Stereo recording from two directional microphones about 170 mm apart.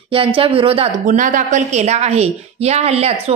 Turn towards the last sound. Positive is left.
turn(degrees=-40)  # may be behind; listen again after turning